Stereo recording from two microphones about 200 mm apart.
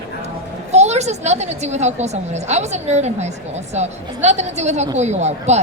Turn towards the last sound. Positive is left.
turn(degrees=-35)  # may be behind; listen again after turning